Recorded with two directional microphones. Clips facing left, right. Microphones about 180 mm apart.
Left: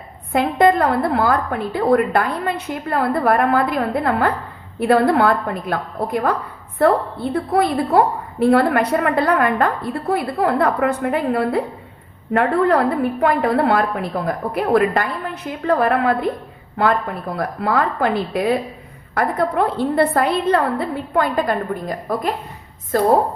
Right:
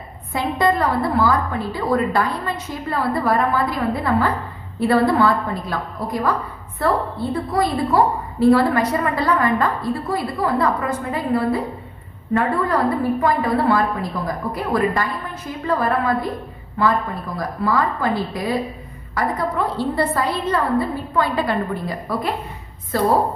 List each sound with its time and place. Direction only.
0.3 s a woman's voice: 55° left (ahead or behind)
19.1 s a woman's voice: 55° left (ahead or behind)